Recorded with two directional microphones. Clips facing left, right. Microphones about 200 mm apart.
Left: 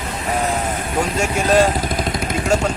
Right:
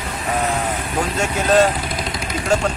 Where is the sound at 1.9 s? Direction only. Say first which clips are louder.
Left 4 dB; 50° left (ahead or behind).